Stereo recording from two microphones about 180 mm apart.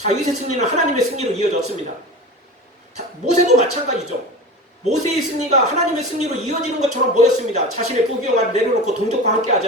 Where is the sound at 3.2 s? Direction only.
40° right (ahead or behind).